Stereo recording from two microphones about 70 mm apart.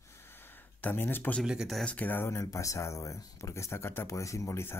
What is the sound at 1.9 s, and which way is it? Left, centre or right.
Speech, left.